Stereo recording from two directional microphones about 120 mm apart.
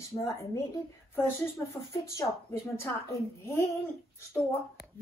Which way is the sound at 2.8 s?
25° left (ahead or behind).